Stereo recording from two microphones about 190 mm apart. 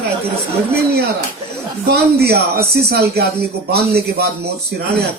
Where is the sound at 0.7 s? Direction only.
60° right (ahead or behind).